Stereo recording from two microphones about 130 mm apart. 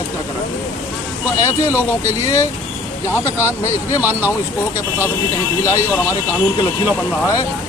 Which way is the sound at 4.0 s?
15° right (ahead or behind).